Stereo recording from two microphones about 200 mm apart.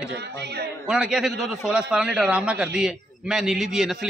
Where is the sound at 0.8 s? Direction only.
5° right (ahead or behind).